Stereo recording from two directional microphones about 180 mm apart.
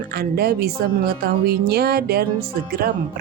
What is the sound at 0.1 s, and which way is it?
Speech, 60° right (ahead or behind).